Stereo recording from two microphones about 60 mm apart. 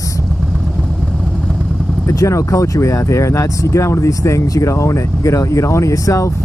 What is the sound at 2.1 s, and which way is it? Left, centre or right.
Speech, left.